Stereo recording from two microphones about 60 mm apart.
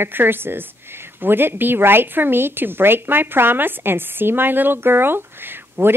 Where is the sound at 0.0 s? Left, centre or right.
Right.